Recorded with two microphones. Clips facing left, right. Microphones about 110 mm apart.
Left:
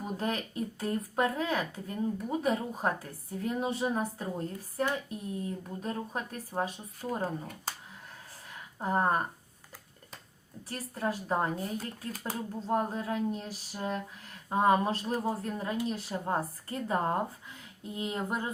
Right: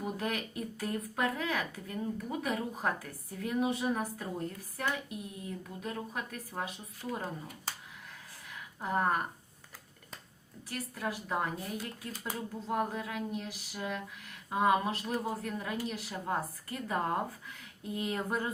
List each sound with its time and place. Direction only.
0.2 s a woman's voice: 30° left (ahead or behind)
8.8 s a woman's voice: 30° left (ahead or behind)
10.7 s a woman's voice: 35° left (ahead or behind)